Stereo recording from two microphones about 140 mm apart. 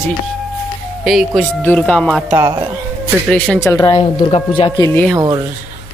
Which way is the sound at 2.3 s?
25° right (ahead or behind).